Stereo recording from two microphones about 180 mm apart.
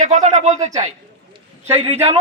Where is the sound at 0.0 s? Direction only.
40° right (ahead or behind).